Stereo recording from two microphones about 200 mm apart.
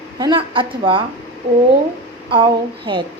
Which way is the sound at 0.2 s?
25° right (ahead or behind).